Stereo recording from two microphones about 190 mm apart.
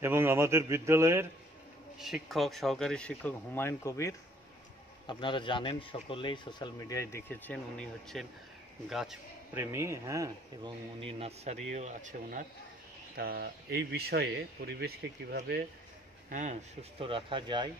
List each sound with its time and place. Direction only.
0.0 s a man's voice: 15° right (ahead or behind)
2.0 s speech: centre (ahead or behind); by 4.1 s 15° left (ahead or behind)
5.0 s a man's voice: 25° left (ahead or behind); by 9.6 s centre (ahead or behind)
9.6 s speech: 15° right (ahead or behind); by 15.6 s 55° right (ahead or behind)
16.3 s speech: 40° right (ahead or behind)
17.0 s speech: 25° right (ahead or behind)